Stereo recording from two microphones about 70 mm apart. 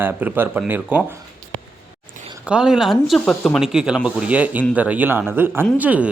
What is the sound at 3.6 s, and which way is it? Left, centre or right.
Speech, centre.